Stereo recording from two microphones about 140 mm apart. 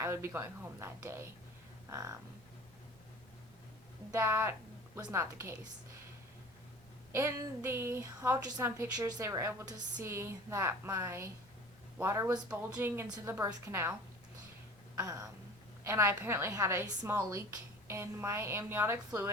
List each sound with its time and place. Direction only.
0.0 s a woman's voice: 20° right (ahead or behind)
1.9 s a sound: 20° right (ahead or behind)
4.1 s a woman's voice: 20° right (ahead or behind)
7.1 s a woman's voice: 20° right (ahead or behind)
14.9 s a woman's voice: 25° right (ahead or behind)